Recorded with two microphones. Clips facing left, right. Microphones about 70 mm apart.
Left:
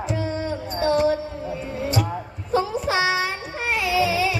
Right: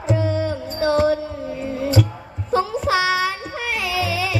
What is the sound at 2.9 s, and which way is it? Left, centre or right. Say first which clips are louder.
Music: right 3 dB; left.